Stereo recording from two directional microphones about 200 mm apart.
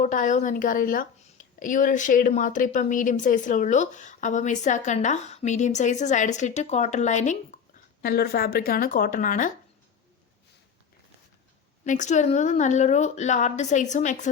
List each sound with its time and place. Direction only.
0.0 s a woman's voice: 40° left (ahead or behind)
8.0 s a woman's voice: 50° left (ahead or behind)
11.9 s a woman's voice: 35° left (ahead or behind)